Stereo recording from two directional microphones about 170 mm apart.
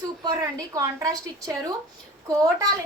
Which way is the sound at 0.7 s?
20° right (ahead or behind).